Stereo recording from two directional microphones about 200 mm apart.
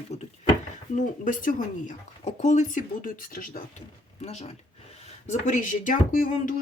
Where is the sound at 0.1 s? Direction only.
35° left (ahead or behind).